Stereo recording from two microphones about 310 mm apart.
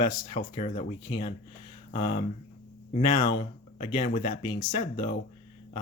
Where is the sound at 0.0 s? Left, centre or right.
Centre.